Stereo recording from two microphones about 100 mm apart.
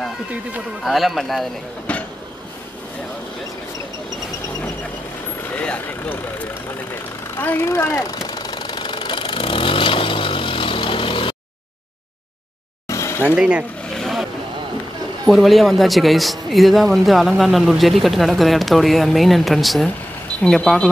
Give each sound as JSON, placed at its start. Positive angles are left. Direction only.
{"t": 0.8, "sound": "speech", "side_deg": 0}
{"t": 1.9, "sound": "vehicle", "side_deg": 15}
{"t": 5.5, "sound": "speech", "side_deg": 15}
{"t": 7.3, "sound": "engine", "side_deg": 20}
{"t": 12.8, "sound": "a sound", "side_deg": 30}
{"t": 13.4, "sound": "speech", "side_deg": -10}
{"t": 13.9, "sound": "vehicle", "side_deg": 0}
{"t": 15.2, "sound": "speech", "side_deg": 0}